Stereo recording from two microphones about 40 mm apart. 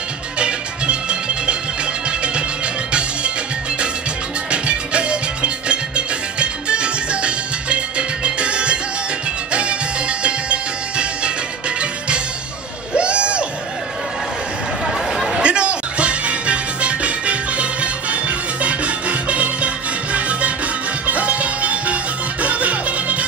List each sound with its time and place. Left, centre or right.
0.4 s music: right
4.5 s music: right
12.9 s music: right
14.9 s chatter: centre
15.3 s music: right